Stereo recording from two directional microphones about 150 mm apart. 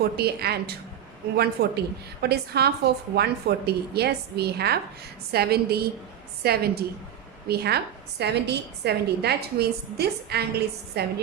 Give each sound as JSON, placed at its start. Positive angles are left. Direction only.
{"t": 0.0, "sound": "a woman's voice", "side_deg": -90}